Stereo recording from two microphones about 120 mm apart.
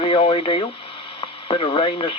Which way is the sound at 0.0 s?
45° left (ahead or behind).